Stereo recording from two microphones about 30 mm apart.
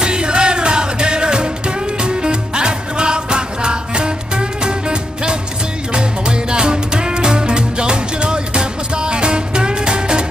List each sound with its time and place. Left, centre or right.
0.0 s music: right